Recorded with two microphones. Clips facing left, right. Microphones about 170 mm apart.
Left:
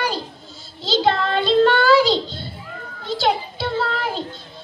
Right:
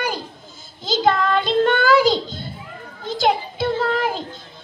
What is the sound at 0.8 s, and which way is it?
Child singing, 45° right (ahead or behind).